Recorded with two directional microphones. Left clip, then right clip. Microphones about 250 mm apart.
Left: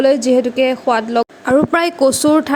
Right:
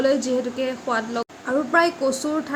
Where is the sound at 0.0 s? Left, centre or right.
Left.